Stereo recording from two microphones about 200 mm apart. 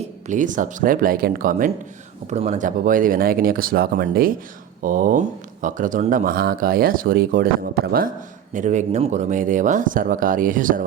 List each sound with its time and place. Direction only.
0.3 s speech: 40° right (ahead or behind)